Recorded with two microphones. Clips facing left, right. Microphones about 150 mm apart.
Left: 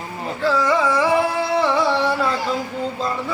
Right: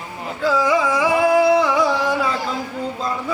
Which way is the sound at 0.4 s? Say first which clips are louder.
Right 1 dB; 5° right (ahead or behind).